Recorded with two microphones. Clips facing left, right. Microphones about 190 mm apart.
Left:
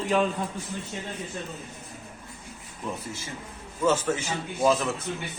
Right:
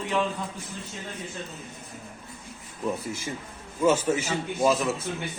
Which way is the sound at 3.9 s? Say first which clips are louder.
Right 2 dB; 10° right (ahead or behind).